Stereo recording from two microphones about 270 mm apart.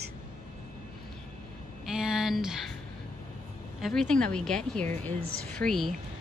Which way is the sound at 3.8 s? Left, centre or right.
Centre.